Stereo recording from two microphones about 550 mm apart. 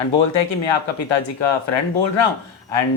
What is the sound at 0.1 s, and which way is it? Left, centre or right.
Speech, left.